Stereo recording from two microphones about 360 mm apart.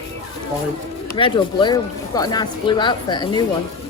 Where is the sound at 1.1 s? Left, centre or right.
Centre.